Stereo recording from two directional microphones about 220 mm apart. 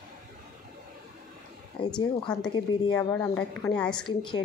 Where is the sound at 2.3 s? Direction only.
5° left (ahead or behind).